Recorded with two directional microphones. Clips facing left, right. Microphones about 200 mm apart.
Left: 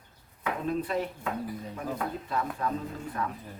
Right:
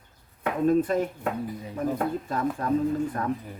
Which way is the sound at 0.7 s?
45° right (ahead or behind).